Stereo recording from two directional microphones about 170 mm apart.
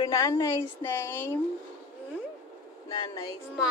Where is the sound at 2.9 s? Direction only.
20° left (ahead or behind).